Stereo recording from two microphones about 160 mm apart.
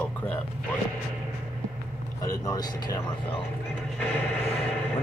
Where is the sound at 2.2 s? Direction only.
20° left (ahead or behind).